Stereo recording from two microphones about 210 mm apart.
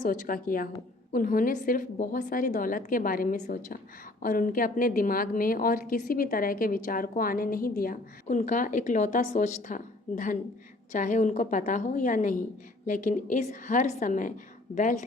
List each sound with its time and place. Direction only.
0.0 s a woman's voice: 40° left (ahead or behind)